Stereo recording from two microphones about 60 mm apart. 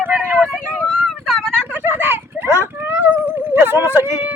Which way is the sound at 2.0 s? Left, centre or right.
Right.